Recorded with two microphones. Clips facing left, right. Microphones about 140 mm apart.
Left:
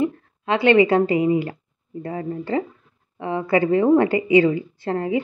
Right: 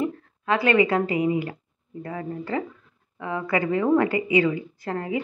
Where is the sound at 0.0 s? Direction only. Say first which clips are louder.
Left 4 dB; 25° left (ahead or behind).